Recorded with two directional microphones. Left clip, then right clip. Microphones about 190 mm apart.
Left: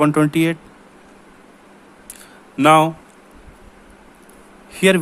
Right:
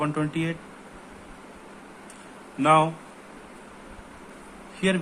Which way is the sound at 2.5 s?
60° left (ahead or behind).